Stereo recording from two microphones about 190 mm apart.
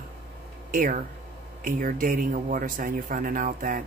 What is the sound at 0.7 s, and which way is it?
Speech, 45° right (ahead or behind).